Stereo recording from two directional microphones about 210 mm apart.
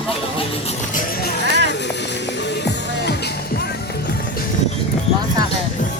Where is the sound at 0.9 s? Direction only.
50° left (ahead or behind).